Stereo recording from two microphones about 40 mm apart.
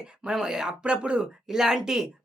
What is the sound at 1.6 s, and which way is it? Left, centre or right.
Speech, centre.